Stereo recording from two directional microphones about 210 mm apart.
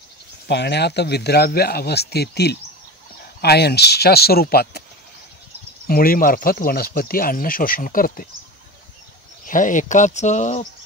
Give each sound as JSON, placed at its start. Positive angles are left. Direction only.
{"t": 0.5, "sound": "speech", "side_deg": 55}
{"t": 5.9, "sound": "speech", "side_deg": 45}
{"t": 9.5, "sound": "speech", "side_deg": 40}